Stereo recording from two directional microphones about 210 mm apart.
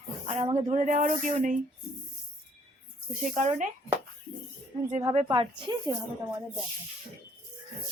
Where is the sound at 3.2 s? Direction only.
35° right (ahead or behind).